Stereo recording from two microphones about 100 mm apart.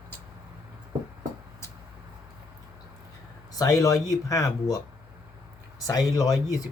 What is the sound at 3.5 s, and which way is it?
Speech, 35° left (ahead or behind).